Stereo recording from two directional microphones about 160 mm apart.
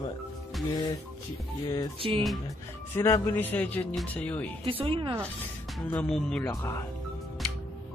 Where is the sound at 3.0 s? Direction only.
15° left (ahead or behind).